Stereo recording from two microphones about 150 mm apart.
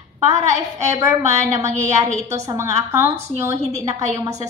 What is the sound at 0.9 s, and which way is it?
A woman's voice, 20° right (ahead or behind).